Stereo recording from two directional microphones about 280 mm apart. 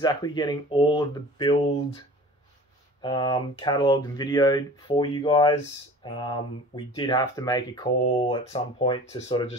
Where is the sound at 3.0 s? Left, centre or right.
Centre.